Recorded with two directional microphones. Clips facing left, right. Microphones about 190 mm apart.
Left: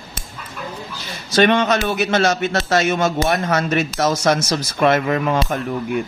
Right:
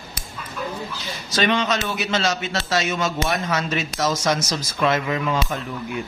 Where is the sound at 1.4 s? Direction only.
55° left (ahead or behind).